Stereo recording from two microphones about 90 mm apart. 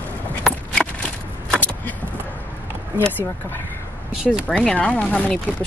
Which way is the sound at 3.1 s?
20° left (ahead or behind).